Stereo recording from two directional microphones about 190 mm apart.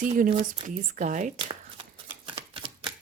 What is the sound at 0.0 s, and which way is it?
Speech, 45° right (ahead or behind).